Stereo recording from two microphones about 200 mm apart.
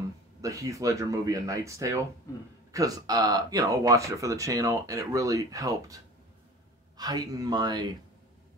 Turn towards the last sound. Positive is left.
turn(degrees=-20)  # may be behind; listen again after turning